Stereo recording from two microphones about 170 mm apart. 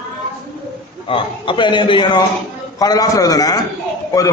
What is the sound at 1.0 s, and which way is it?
A man's voice, 30° left (ahead or behind).